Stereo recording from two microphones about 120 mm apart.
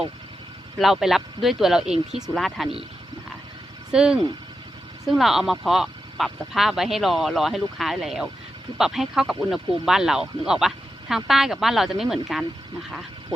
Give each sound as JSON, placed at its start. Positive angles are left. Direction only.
{"t": 0.8, "sound": "speech", "side_deg": 0}
{"t": 3.9, "sound": "speech", "side_deg": -5}